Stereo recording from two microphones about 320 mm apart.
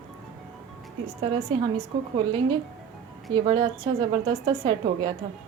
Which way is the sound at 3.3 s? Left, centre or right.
Centre.